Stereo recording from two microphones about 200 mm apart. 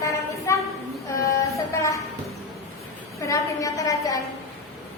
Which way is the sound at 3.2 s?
15° left (ahead or behind).